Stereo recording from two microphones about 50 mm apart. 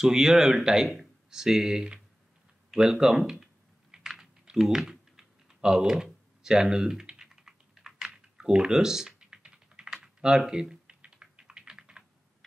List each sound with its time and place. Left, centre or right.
0.0 s speech: centre
3.9 s typing: centre
6.4 s speech: centre
7.2 s typing: centre
10.5 s speech: centre
11.0 s typing: centre